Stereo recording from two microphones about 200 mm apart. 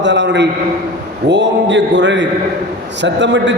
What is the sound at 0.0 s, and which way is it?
A man's voice, 60° right (ahead or behind).